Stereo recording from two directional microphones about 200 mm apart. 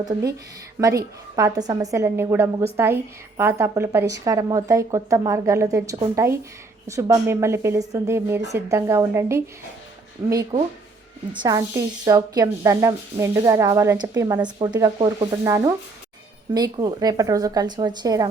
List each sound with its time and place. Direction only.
0.0 s a woman's voice: 20° right (ahead or behind)